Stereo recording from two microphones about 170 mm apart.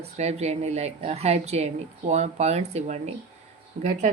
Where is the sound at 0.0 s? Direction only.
40° right (ahead or behind).